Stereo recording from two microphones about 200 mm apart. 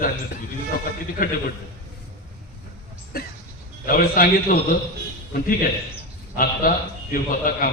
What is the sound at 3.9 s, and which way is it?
Speech, 45° left (ahead or behind).